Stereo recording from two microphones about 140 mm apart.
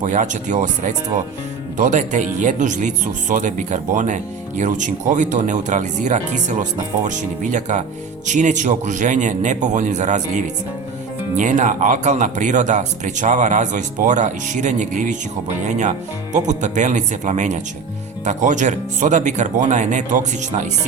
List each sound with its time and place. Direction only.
0.0 s speech: 60° right (ahead or behind)